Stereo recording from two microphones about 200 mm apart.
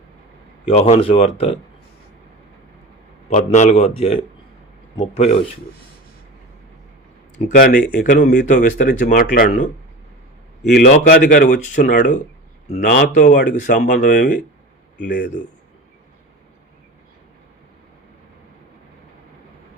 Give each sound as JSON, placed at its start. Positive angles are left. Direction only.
{"t": 0.7, "sound": "speech", "side_deg": 30}
{"t": 3.2, "sound": "a man's voice", "side_deg": 35}
{"t": 7.5, "sound": "speech", "side_deg": 45}
{"t": 10.6, "sound": "speech", "side_deg": 55}